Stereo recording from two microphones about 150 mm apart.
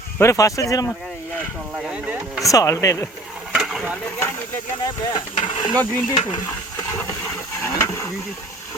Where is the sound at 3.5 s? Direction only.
Centre (ahead or behind).